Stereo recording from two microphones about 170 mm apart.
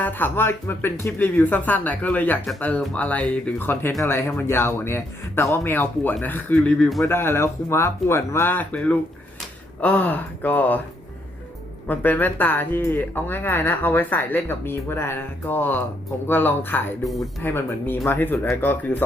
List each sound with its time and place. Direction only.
0.0 s speech: 10° left (ahead or behind)
11.9 s speech: 10° left (ahead or behind)
17.0 s speech: centre (ahead or behind)
17.4 s speech: 15° left (ahead or behind)